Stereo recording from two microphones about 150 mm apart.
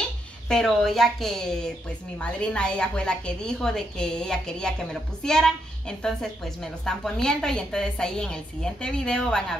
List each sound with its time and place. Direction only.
0.5 s a woman's voice: centre (ahead or behind)